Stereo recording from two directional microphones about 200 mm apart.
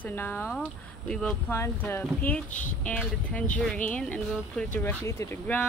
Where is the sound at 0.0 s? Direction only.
10° left (ahead or behind).